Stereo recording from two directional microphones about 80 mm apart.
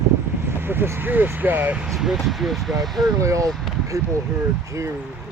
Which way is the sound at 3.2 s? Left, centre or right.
Right.